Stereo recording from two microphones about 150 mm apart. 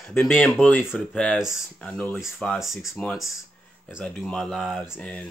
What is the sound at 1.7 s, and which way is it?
Speech, 10° left (ahead or behind).